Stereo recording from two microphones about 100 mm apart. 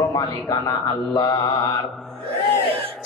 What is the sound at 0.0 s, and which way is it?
Speech, 35° left (ahead or behind).